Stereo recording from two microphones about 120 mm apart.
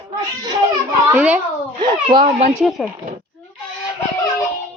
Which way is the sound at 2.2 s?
90° right.